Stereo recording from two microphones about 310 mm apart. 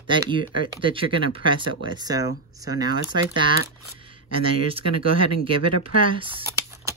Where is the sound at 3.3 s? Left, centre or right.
Centre.